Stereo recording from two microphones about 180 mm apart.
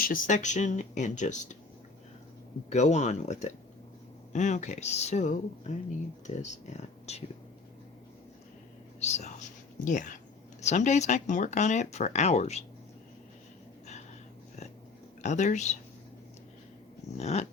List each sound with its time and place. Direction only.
0.0 s speech: 45° left (ahead or behind)
2.6 s speech: 40° left (ahead or behind)
9.0 s speech: 40° left (ahead or behind)
15.2 s speech: 40° left (ahead or behind)
17.2 s speech: 35° left (ahead or behind)